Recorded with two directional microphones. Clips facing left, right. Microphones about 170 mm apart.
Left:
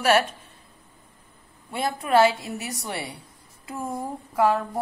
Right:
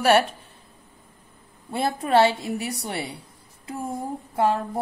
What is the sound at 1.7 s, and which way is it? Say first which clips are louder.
Speech: right 1 dB; 35° right (ahead or behind).